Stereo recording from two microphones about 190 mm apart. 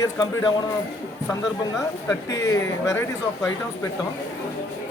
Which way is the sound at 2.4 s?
15° left (ahead or behind).